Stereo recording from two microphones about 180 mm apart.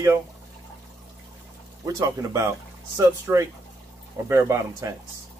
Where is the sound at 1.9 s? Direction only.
15° right (ahead or behind).